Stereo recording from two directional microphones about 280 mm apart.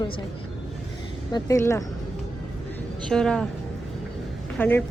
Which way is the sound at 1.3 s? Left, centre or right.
Centre.